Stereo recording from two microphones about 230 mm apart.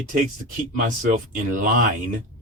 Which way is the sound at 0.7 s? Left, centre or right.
Right.